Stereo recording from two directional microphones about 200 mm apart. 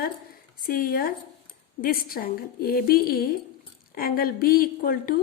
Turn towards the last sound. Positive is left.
turn(degrees=45)  # may be behind; listen again after turning